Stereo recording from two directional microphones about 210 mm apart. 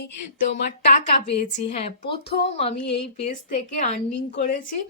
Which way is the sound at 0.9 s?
35° left (ahead or behind).